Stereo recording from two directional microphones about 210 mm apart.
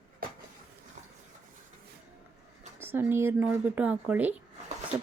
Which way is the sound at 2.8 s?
10° right (ahead or behind).